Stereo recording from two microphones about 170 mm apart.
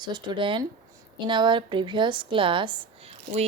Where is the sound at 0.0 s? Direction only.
25° right (ahead or behind).